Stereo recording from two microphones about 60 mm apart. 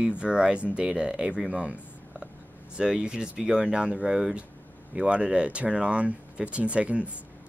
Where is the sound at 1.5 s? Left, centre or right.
Centre.